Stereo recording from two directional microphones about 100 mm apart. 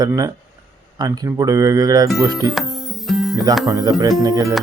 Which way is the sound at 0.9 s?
35° right (ahead or behind).